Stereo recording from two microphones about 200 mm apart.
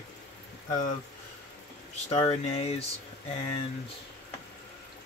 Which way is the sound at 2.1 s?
30° left (ahead or behind).